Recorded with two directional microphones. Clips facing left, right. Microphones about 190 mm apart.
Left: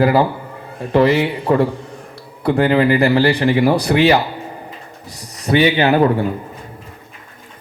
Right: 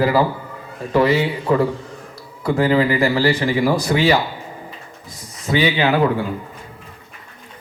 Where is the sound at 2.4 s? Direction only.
60° left (ahead or behind).